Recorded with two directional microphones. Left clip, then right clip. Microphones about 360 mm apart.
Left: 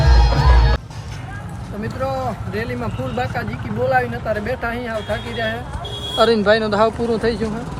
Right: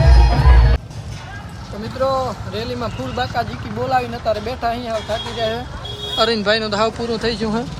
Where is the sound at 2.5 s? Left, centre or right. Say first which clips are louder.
Right 1 dB; centre.